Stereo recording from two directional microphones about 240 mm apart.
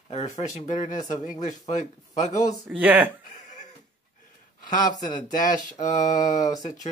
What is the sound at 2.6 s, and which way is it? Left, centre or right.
Speech, centre.